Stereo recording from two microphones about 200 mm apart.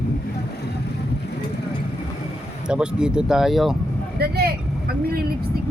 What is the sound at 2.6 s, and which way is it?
Speech, 5° right (ahead or behind).